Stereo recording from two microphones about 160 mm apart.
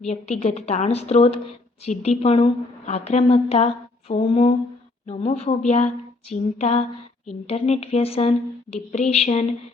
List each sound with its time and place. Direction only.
0.1 s a woman's voice: 45° left (ahead or behind)